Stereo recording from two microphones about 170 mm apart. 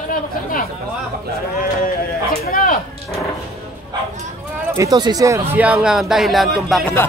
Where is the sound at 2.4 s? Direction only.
55° left (ahead or behind).